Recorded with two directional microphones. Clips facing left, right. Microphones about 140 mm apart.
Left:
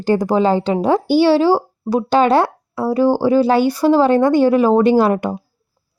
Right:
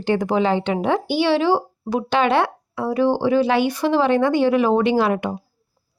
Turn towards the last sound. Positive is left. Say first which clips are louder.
# left 5 dB
turn(degrees=40)  # may be behind; listen again after turning